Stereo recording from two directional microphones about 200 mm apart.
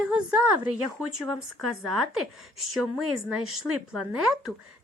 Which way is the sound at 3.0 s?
90° right.